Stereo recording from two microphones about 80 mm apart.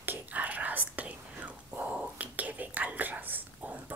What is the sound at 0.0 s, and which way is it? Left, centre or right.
Whispering, right.